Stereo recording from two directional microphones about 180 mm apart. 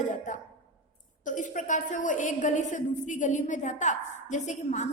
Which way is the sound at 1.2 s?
45° left (ahead or behind).